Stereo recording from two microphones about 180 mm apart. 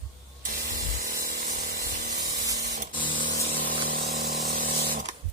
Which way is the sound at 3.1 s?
50° right (ahead or behind).